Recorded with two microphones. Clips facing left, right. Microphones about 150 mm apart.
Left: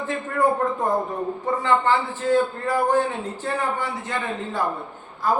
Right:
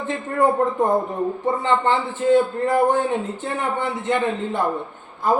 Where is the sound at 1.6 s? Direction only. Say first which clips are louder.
Left 1 dB; 20° right (ahead or behind).